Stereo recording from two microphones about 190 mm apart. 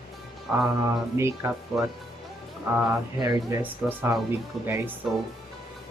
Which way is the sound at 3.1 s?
15° right (ahead or behind).